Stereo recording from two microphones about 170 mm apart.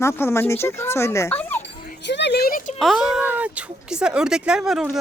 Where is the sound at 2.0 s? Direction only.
90° left; by 2.7 s 55° left (ahead or behind).